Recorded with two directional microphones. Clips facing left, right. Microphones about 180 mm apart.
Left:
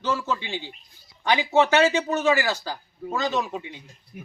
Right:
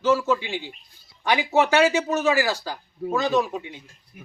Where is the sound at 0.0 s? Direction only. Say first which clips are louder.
Right 6 dB; 10° right (ahead or behind).